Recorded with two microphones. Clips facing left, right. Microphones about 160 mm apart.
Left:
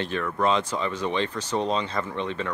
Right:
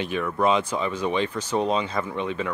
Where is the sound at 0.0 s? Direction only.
10° right (ahead or behind).